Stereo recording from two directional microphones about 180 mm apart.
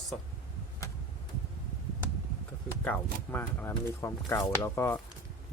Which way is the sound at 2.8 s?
10° left (ahead or behind).